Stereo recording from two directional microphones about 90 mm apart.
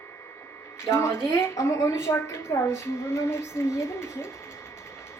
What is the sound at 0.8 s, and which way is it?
A woman's voice, 30° left (ahead or behind).